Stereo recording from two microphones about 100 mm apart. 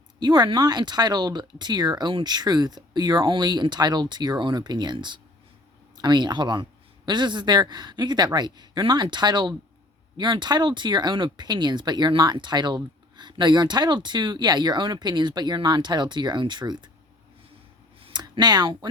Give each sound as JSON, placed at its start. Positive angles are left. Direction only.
{"t": 0.2, "sound": "speech", "side_deg": -45}
{"t": 18.1, "sound": "speech", "side_deg": -45}